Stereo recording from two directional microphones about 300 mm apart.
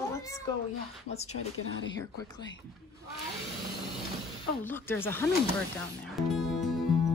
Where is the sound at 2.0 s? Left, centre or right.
Centre.